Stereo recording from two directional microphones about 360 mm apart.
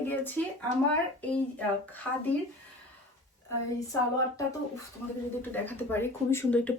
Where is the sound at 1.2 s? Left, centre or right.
Centre.